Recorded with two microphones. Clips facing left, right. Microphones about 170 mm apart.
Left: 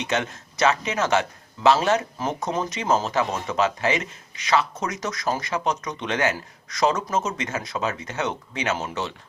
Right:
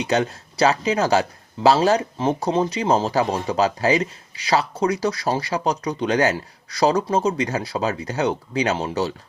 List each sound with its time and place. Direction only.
0.1 s a man's voice: 35° right (ahead or behind)